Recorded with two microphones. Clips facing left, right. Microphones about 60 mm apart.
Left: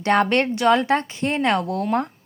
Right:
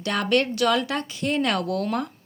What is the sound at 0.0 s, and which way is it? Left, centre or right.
Speech, left.